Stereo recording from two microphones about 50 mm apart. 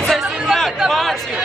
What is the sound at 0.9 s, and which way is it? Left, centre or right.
Speech, centre.